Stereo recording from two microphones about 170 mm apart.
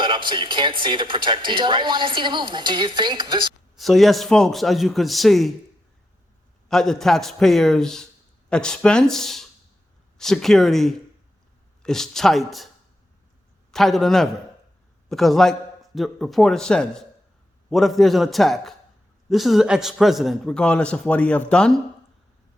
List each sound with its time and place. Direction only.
0.0 s speech: 30° right (ahead or behind)
3.8 s a man's voice: centre (ahead or behind)
6.7 s a man's voice: 5° left (ahead or behind)
13.7 s a man's voice: centre (ahead or behind)